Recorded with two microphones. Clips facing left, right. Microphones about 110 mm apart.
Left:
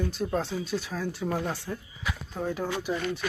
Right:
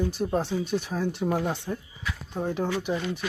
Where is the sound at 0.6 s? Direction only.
55° right (ahead or behind).